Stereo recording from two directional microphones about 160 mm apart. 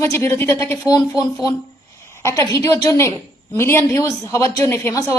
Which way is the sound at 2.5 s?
20° left (ahead or behind).